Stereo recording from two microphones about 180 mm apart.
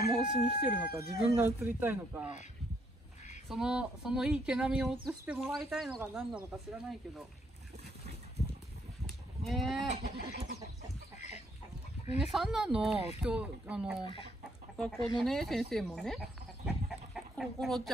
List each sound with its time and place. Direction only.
0.7 s speech: 15° right (ahead or behind)
3.4 s speech: 5° right (ahead or behind)
9.0 s livestock: centre (ahead or behind)
10.0 s chicken: 60° right (ahead or behind)
11.1 s chicken: 40° left (ahead or behind)
12.2 s speech: centre (ahead or behind)